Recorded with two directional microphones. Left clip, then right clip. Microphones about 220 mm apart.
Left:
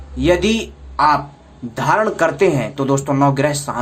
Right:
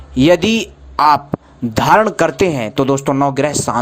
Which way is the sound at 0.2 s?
40° right (ahead or behind).